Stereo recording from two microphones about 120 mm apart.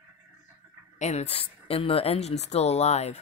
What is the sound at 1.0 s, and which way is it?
Speech, 65° left (ahead or behind).